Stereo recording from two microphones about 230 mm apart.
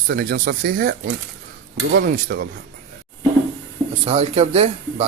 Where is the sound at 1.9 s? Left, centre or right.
Right.